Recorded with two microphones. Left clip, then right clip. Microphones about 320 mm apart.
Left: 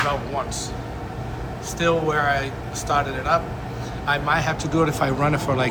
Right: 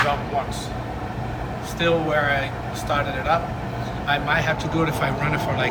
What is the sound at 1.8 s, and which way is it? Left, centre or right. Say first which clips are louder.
Speech: even; centre.